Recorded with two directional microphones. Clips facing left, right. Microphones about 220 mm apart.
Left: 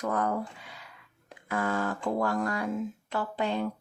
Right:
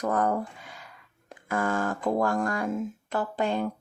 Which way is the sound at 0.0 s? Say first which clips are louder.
Right 3 dB; 45° right (ahead or behind).